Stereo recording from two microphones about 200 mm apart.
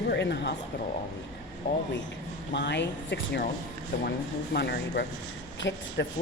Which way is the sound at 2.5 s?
60° left (ahead or behind).